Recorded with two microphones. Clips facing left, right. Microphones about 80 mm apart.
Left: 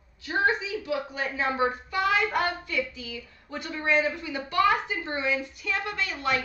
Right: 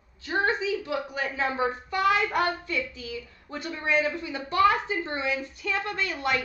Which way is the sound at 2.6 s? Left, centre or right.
Right.